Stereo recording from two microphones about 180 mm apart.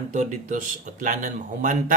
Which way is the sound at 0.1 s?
40° right (ahead or behind).